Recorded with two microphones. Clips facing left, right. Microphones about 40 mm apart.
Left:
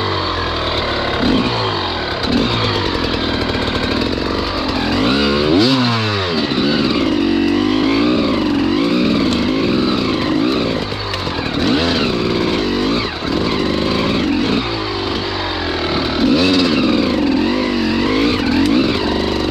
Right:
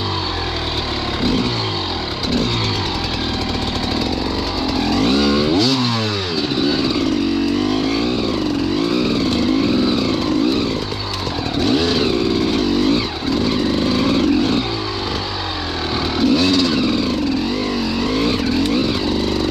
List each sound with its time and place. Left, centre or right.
1.2 s vehicle: left
4.8 s vehicle: left
11.6 s vehicle: centre
16.2 s vehicle: centre
18.0 s vehicle: left